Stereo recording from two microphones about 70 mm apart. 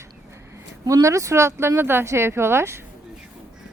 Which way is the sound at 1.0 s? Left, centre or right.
Right.